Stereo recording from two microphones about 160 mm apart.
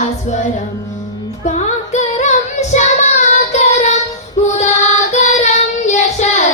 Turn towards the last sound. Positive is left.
turn(degrees=45)  # may be behind; listen again after turning